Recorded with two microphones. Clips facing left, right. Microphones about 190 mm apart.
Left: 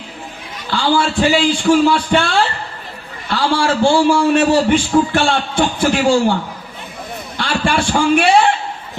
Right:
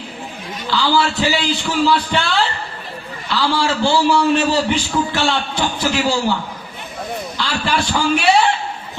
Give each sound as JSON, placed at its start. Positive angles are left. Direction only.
{"t": 0.7, "sound": "a man's voice", "side_deg": 50}
{"t": 3.2, "sound": "a man's voice", "side_deg": 50}
{"t": 7.3, "sound": "a man's voice", "side_deg": 60}